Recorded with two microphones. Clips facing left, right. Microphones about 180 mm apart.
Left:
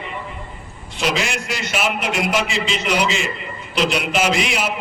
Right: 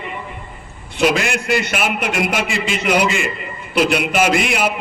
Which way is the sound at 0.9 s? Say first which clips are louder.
Right 5 dB; 55° right (ahead or behind).